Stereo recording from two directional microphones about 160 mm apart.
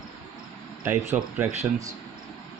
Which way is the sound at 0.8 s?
15° right (ahead or behind).